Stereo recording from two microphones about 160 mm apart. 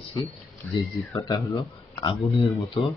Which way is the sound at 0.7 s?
20° left (ahead or behind).